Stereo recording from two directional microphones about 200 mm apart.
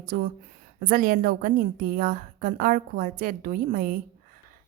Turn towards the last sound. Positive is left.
turn(degrees=-45)  # may be behind; listen again after turning